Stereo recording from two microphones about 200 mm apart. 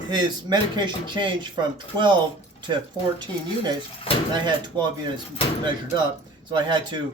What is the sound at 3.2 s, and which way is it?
Speech, 20° right (ahead or behind).